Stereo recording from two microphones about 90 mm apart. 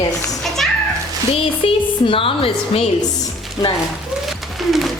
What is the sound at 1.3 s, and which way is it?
Music, 90° left.